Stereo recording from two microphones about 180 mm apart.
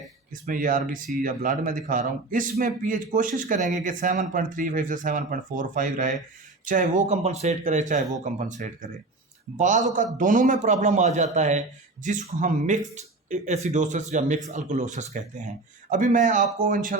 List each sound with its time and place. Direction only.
0.4 s speech: 50° right (ahead or behind)